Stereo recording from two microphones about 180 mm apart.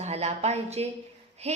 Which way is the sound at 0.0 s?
35° right (ahead or behind).